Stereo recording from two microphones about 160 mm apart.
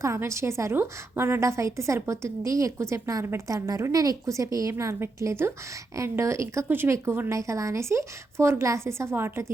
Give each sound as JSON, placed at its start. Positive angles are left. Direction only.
{"t": 0.0, "sound": "a woman's voice", "side_deg": -15}